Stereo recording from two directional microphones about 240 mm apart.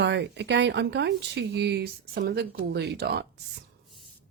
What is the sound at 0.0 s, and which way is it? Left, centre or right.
Speech, right.